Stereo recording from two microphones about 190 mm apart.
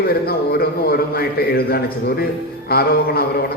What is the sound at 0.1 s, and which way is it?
A man's voice, 55° left (ahead or behind).